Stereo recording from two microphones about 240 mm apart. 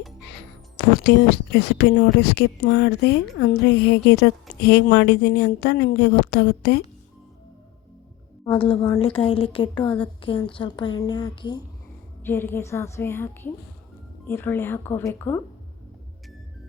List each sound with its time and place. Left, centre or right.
1.0 s speech: left
8.5 s a woman's voice: left